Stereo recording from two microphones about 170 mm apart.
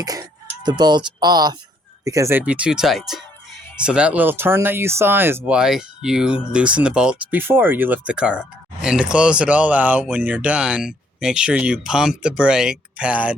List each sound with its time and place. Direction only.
0.0 s speech: 20° right (ahead or behind)